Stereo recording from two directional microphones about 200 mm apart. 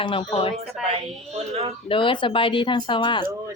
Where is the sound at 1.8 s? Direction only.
25° left (ahead or behind).